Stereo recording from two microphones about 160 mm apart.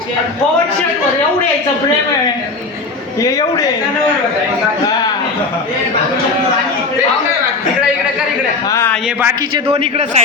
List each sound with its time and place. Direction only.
3.2 s a man's voice: 20° left (ahead or behind)
9.6 s a man's voice: 40° right (ahead or behind)